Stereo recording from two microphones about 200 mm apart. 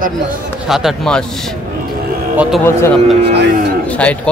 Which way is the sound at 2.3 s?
5° right (ahead or behind).